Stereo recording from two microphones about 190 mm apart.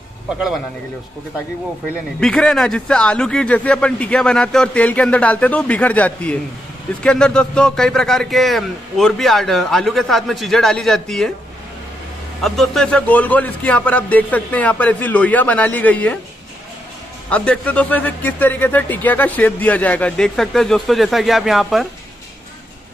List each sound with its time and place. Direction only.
2.1 s speech: 5° left (ahead or behind)
12.4 s speech: centre (ahead or behind)
17.3 s speech: 5° left (ahead or behind)